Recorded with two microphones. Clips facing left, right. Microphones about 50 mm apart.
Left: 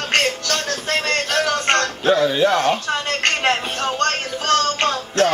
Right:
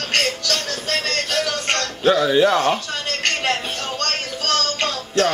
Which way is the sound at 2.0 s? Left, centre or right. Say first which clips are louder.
Right 2 dB; centre.